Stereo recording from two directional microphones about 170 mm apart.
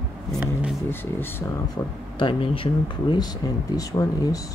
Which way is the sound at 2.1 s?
30° left (ahead or behind).